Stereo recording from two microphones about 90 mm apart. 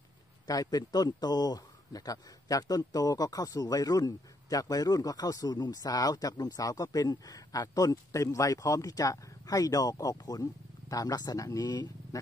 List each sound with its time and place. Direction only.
0.5 s a man's voice: 45° left (ahead or behind)